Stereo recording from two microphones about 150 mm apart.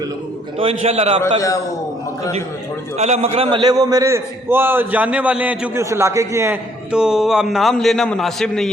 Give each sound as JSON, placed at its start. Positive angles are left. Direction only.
{"t": 0.6, "sound": "a man's voice", "side_deg": -40}
{"t": 1.4, "sound": "a man's voice", "side_deg": 20}
{"t": 3.0, "sound": "a man's voice", "side_deg": -45}
{"t": 6.9, "sound": "a man's voice", "side_deg": -5}